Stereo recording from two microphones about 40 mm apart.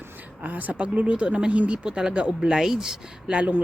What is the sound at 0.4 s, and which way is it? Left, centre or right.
Speech, right.